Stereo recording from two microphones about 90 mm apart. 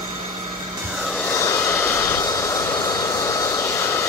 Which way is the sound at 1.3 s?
35° left (ahead or behind).